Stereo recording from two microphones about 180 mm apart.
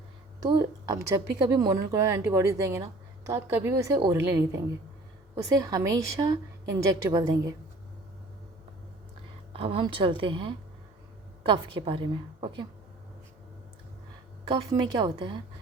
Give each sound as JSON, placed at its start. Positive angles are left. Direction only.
{"t": 0.4, "sound": "a woman's voice", "side_deg": -20}
{"t": 9.5, "sound": "a woman's voice", "side_deg": -30}
{"t": 14.4, "sound": "a woman's voice", "side_deg": -25}